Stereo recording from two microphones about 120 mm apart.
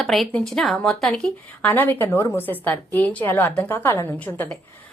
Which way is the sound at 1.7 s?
15° left (ahead or behind).